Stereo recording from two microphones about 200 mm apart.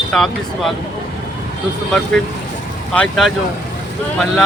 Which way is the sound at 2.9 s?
Centre (ahead or behind).